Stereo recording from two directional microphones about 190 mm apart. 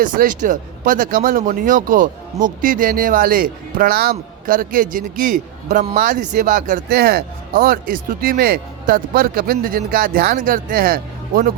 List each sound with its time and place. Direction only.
0.0 s speech: 45° right (ahead or behind)